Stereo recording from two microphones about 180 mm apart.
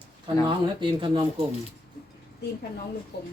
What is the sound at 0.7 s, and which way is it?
Speech, 25° right (ahead or behind).